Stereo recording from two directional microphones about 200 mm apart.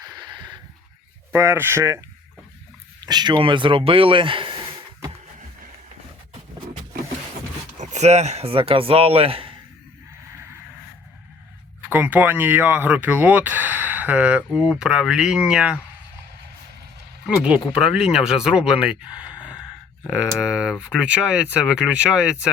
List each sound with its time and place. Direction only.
0.0 s a sound: 20° right (ahead or behind)
1.3 s speech: 10° right (ahead or behind)
7.8 s speech: 35° right (ahead or behind)
11.9 s speech: 10° right (ahead or behind)
17.2 s speech: 5° right (ahead or behind)